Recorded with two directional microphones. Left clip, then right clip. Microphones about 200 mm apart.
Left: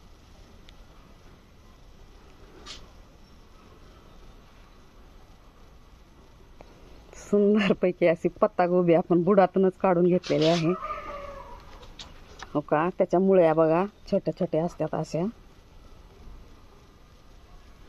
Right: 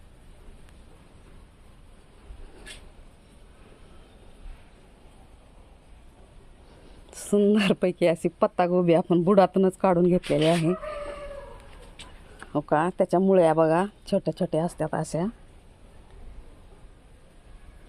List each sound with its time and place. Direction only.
7.3 s speech: 35° right (ahead or behind)
12.4 s speech: 35° right (ahead or behind)